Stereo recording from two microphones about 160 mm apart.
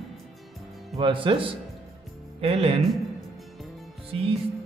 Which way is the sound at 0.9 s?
30° right (ahead or behind).